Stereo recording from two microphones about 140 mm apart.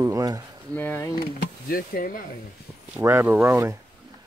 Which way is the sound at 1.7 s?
90° left.